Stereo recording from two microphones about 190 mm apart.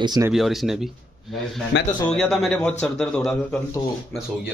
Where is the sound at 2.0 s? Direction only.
5° left (ahead or behind).